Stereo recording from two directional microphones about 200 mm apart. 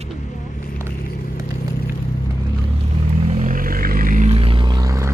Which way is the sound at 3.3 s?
40° right (ahead or behind).